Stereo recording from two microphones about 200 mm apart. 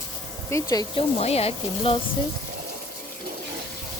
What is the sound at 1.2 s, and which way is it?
Speech, 30° left (ahead or behind).